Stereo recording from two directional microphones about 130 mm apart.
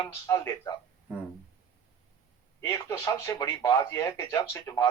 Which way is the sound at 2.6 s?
25° left (ahead or behind).